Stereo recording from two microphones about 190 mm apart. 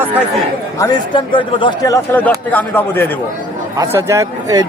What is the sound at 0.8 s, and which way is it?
A man's voice, 25° left (ahead or behind).